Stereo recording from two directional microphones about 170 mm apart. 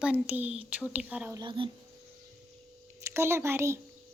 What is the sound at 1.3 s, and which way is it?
Speech, 30° right (ahead or behind).